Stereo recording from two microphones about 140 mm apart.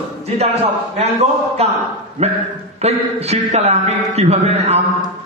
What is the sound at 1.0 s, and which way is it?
Speech, 50° right (ahead or behind).